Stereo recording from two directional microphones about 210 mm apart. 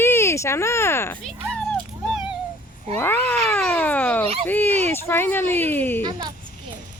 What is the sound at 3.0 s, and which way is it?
Speech, 10° left (ahead or behind).